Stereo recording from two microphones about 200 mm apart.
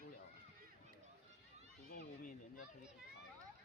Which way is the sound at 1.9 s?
40° left (ahead or behind).